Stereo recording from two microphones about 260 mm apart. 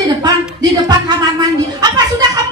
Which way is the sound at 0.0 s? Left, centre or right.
Centre.